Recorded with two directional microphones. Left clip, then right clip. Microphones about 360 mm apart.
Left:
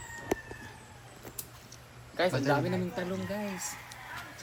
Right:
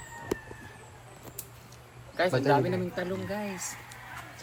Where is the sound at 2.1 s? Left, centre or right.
Centre.